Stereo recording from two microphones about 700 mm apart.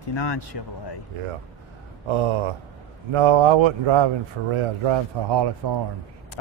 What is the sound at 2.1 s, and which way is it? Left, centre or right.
Speech, right.